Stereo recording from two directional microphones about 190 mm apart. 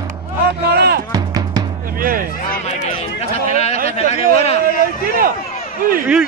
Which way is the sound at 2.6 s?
35° left (ahead or behind).